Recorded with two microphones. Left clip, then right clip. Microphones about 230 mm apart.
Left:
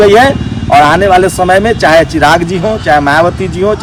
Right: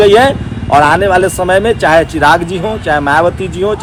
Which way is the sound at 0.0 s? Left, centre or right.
Left.